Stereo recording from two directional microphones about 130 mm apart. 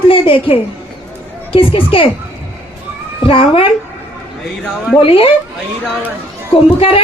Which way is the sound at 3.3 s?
45° left (ahead or behind).